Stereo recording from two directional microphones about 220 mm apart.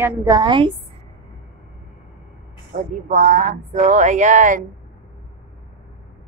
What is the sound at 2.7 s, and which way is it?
Speech, 30° right (ahead or behind).